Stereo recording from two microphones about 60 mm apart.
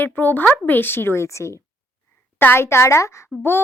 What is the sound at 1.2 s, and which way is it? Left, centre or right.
Speech, left.